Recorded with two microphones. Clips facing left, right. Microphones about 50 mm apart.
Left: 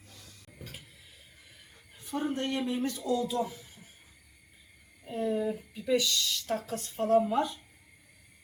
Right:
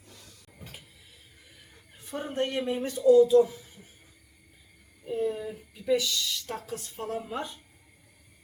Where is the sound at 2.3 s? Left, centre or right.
Right.